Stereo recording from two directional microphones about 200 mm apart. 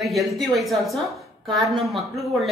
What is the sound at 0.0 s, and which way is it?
A woman's voice, centre (ahead or behind).